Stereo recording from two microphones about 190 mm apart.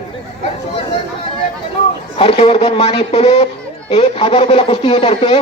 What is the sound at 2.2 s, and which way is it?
A man's voice, 30° left (ahead or behind).